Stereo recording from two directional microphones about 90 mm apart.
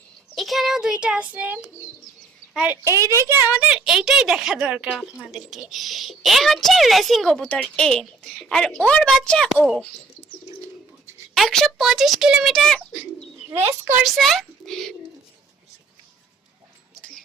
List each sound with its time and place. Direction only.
0.3 s child singing: centre (ahead or behind); by 1.6 s 20° right (ahead or behind)
2.8 s a child's voice: 35° right (ahead or behind)
3.5 s a woman's voice: 10° right (ahead or behind); by 9.5 s 10° left (ahead or behind)
11.3 s a woman's voice: 5° left (ahead or behind)
12.5 s a woman's voice: 5° left (ahead or behind)
14.0 s a woman's voice: centre (ahead or behind)
17.0 s a sound: 10° left (ahead or behind)